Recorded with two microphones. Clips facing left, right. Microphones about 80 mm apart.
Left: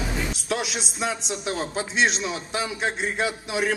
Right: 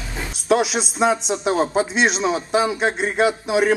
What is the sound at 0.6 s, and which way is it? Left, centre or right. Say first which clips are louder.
A man's voice: right 9 dB; right.